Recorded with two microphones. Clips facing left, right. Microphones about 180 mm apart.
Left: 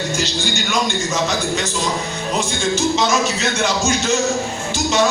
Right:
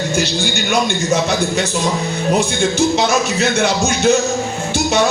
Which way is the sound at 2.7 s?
60° right (ahead or behind).